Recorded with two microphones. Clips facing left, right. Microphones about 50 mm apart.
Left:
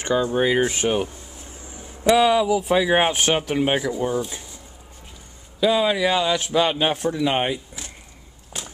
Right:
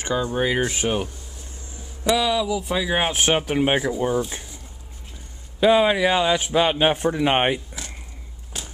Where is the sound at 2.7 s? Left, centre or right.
Centre.